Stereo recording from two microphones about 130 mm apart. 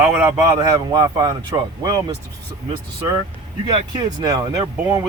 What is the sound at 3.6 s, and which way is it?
Speech, 35° right (ahead or behind).